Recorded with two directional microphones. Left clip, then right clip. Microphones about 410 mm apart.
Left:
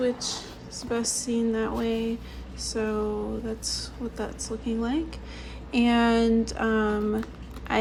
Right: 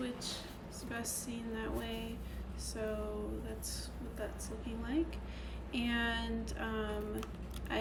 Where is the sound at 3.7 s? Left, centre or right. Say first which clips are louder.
Left 14 dB; centre.